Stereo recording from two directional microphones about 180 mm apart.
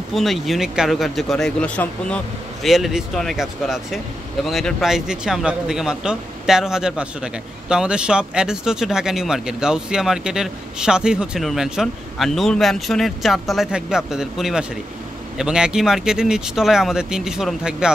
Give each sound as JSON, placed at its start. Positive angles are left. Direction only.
{"t": 0.1, "sound": "speech", "side_deg": 0}